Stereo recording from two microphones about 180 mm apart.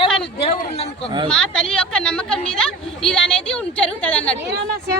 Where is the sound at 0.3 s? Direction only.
35° left (ahead or behind).